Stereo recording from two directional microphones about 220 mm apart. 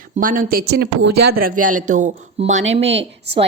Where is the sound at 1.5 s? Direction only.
90° right.